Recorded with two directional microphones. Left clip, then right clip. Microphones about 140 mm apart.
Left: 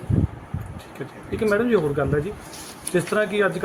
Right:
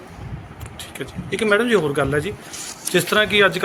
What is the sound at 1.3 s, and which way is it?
Speech, 15° right (ahead or behind).